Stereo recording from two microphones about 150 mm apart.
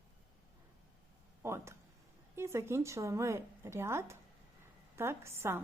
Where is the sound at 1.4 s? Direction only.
20° right (ahead or behind).